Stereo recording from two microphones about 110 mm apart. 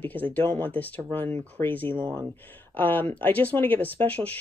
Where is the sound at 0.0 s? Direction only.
15° left (ahead or behind).